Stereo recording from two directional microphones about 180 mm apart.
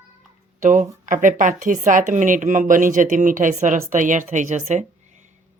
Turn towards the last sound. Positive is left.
turn(degrees=-40)  # may be behind; listen again after turning